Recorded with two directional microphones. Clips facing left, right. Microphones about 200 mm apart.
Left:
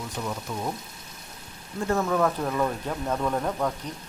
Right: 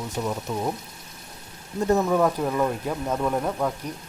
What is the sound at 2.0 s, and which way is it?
Speech, 10° right (ahead or behind).